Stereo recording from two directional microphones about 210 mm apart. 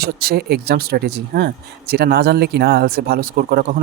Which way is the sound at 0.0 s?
45° right (ahead or behind).